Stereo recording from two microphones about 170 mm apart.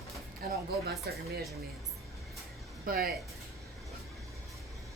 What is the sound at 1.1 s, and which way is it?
Speech, 70° right (ahead or behind).